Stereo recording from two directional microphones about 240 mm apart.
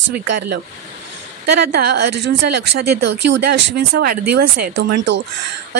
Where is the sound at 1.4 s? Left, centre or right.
Right.